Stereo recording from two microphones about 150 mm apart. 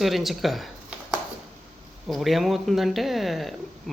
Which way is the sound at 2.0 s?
Centre (ahead or behind).